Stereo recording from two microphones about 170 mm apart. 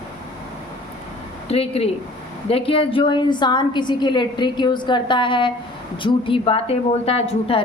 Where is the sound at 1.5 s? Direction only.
35° left (ahead or behind).